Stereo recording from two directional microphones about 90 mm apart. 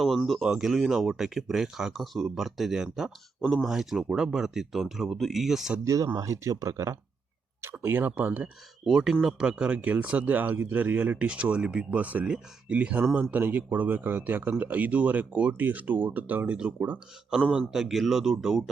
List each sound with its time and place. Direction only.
0.3 s speech: 5° right (ahead or behind)
5.8 s speech: 35° right (ahead or behind); by 8.4 s 20° right (ahead or behind)
8.8 s a man's voice: 5° right (ahead or behind)
17.6 s speech: 5° right (ahead or behind)